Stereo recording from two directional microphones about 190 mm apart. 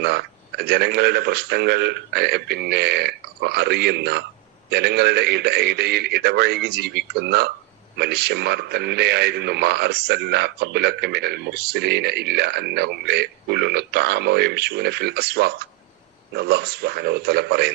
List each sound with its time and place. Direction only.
0.0 s a man's voice: 60° right (ahead or behind)